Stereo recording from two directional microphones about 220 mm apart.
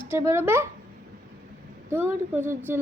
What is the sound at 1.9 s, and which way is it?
Speech, 10° right (ahead or behind).